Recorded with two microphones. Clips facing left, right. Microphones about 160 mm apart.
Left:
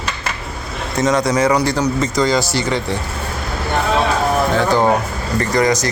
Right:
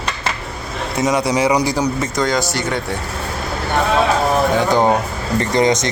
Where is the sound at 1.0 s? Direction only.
15° right (ahead or behind).